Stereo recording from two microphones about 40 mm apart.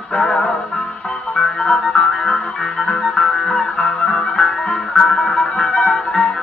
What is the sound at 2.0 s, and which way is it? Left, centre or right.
Music, centre.